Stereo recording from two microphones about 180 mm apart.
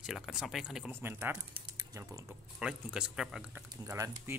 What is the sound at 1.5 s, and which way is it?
Typing, 20° right (ahead or behind).